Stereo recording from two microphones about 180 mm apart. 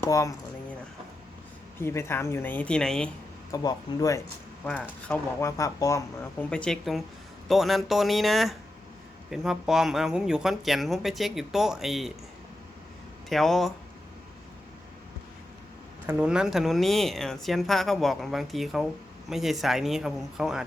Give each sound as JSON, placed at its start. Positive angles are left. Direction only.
{"t": 0.0, "sound": "speech", "side_deg": 15}
{"t": 1.8, "sound": "speech", "side_deg": 15}
{"t": 3.5, "sound": "speech", "side_deg": 20}
{"t": 4.6, "sound": "speech", "side_deg": 5}
{"t": 13.3, "sound": "speech", "side_deg": 0}
{"t": 16.0, "sound": "speech", "side_deg": -5}